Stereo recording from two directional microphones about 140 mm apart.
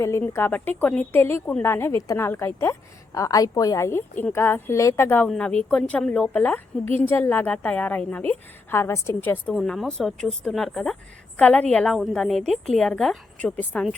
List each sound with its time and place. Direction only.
0.0 s a woman's voice: 20° left (ahead or behind)
9.6 s a woman's voice: centre (ahead or behind)